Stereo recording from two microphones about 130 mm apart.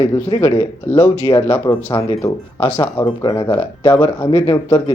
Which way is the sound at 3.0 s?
30° left (ahead or behind).